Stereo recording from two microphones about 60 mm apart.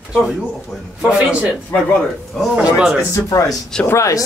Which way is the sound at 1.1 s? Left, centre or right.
Right.